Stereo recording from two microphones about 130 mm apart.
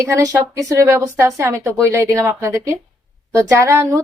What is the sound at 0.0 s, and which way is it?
A woman's voice, 25° right (ahead or behind).